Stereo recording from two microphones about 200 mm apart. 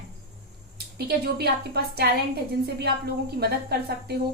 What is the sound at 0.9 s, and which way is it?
A woman's voice, 55° right (ahead or behind).